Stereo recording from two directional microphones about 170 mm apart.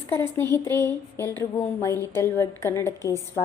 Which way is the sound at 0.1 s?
15° left (ahead or behind).